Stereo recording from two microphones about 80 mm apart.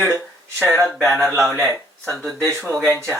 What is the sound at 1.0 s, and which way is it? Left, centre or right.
Speech, centre.